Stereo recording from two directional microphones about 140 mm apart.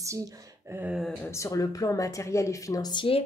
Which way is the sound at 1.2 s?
20° left (ahead or behind).